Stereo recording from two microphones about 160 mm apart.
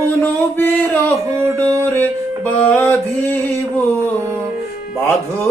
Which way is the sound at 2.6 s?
10° left (ahead or behind).